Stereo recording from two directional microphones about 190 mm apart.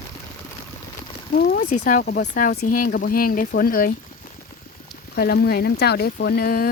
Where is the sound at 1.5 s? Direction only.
45° left (ahead or behind).